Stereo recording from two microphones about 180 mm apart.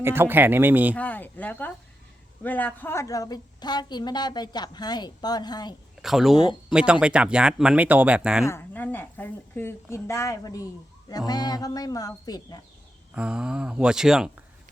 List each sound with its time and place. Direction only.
0.0 s speech: 15° right (ahead or behind)
0.9 s a sound: 10° left (ahead or behind)
2.4 s a woman's voice: 10° left (ahead or behind)
6.0 s speech: centre (ahead or behind)
8.4 s a woman's voice: 10° left (ahead or behind)
13.1 s speech: 5° right (ahead or behind)